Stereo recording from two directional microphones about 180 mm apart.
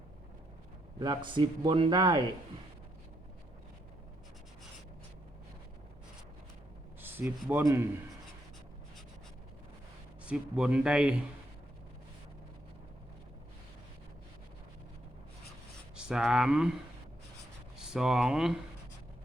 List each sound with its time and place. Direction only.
0.9 s speech: 25° right (ahead or behind)
7.0 s speech: 10° right (ahead or behind)
10.2 s speech: 5° right (ahead or behind)
16.0 s speech: 5° right (ahead or behind)
17.7 s speech: 5° right (ahead or behind)